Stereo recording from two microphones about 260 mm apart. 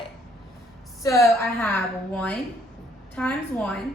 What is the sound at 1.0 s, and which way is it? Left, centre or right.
Speech, centre.